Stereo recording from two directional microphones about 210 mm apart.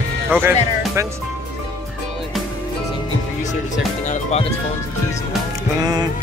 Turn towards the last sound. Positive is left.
turn(degrees=30)  # may be behind; listen again after turning